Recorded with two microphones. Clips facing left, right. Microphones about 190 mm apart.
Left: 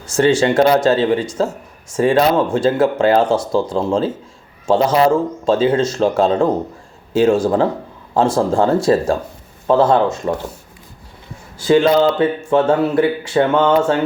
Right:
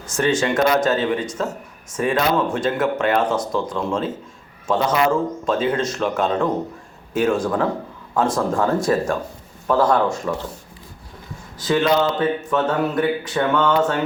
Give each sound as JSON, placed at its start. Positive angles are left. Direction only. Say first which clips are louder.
{"t": 0.1, "sound": "speech", "louder": "left 6 dB", "side_deg": 30}
{"t": 11.5, "sound": "speech", "louder": "left 6 dB", "side_deg": 30}